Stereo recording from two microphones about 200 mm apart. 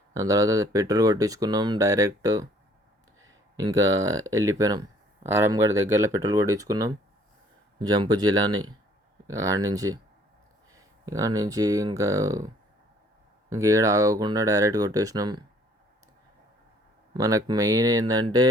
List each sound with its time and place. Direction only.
0.1 s speech: 15° right (ahead or behind)
13.5 s speech: 15° right (ahead or behind)
17.2 s speech: 15° right (ahead or behind)